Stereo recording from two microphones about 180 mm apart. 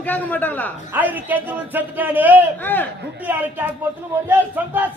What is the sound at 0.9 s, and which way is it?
A man's voice, 10° right (ahead or behind).